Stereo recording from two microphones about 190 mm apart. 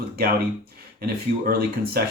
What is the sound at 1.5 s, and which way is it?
Speech, 55° right (ahead or behind).